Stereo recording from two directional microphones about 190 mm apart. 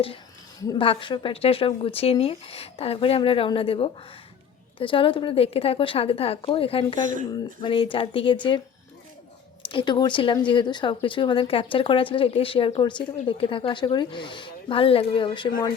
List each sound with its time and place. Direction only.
0.6 s speech: 25° left (ahead or behind)
9.6 s speech: 25° left (ahead or behind)